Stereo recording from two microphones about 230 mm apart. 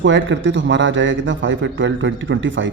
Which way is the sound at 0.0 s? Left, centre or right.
Right.